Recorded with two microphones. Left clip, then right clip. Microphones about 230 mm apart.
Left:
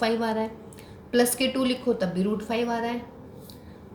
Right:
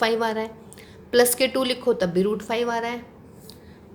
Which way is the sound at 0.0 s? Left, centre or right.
Right.